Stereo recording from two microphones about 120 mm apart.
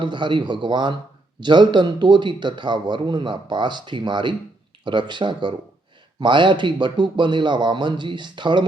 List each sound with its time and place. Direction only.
0.0 s a man's voice: 40° right (ahead or behind)